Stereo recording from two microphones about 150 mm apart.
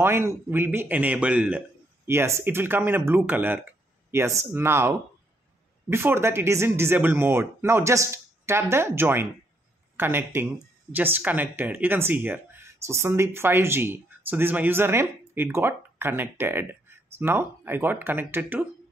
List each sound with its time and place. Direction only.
0.0 s speech: 15° right (ahead or behind)